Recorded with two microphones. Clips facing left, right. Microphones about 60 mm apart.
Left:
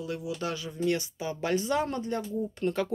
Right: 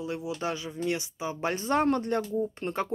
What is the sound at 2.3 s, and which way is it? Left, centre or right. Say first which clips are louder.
Speech: even; right.